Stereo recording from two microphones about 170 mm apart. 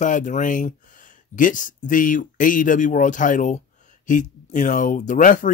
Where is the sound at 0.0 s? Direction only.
45° left (ahead or behind).